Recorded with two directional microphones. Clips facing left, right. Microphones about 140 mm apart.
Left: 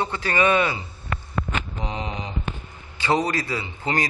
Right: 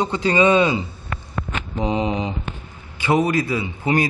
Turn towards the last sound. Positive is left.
turn(degrees=-15)  # may be behind; listen again after turning